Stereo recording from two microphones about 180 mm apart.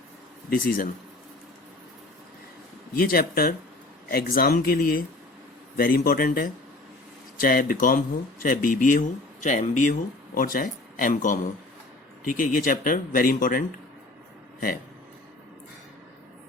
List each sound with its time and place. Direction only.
0.5 s speech: 50° left (ahead or behind)
2.9 s speech: 55° left (ahead or behind)